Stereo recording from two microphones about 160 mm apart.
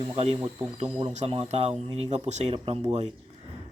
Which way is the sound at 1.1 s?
40° right (ahead or behind).